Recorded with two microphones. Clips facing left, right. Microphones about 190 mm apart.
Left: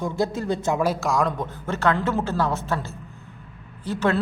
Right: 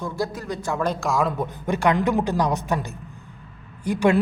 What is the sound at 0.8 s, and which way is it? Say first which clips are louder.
Speech: left 1 dB; 5° left (ahead or behind).